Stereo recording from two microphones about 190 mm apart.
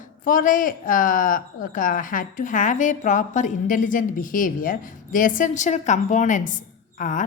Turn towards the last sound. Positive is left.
turn(degrees=45)  # may be behind; listen again after turning